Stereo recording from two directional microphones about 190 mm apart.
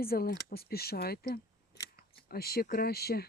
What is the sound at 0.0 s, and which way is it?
Speech, 50° left (ahead or behind).